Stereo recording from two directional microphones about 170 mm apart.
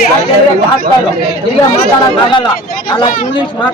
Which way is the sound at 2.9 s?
30° left (ahead or behind).